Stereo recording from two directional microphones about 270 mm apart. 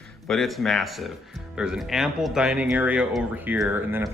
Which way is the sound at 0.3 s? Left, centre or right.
Centre.